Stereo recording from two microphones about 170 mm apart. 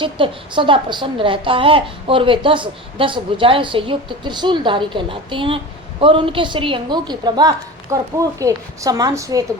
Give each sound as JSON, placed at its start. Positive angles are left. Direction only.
{"t": 0.0, "sound": "a woman's voice", "side_deg": -30}